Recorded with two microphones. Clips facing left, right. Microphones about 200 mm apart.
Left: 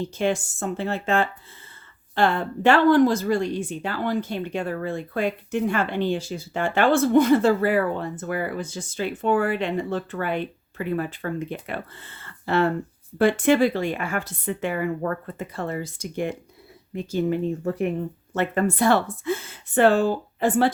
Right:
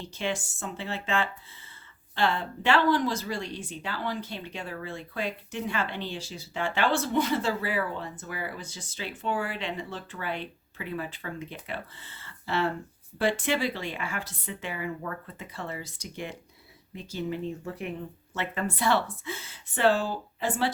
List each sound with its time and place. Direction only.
0.0 s speech: 45° left (ahead or behind)